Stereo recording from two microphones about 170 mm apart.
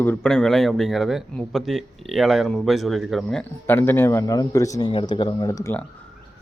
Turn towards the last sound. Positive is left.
turn(degrees=15)  # may be behind; listen again after turning